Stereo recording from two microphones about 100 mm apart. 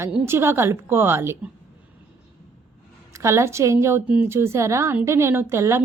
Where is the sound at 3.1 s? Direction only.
30° right (ahead or behind).